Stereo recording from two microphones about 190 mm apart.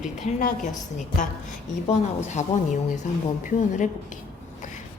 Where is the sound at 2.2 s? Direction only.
40° left (ahead or behind).